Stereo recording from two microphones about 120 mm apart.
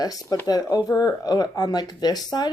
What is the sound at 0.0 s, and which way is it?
Speech, 30° left (ahead or behind).